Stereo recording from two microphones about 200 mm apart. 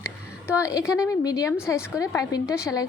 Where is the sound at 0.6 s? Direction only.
15° left (ahead or behind).